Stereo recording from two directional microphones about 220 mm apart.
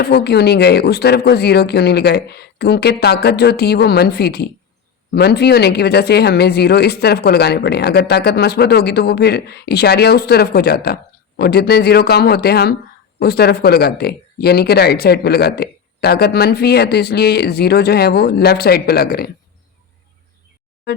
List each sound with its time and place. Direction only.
0.0 s speech: 50° left (ahead or behind)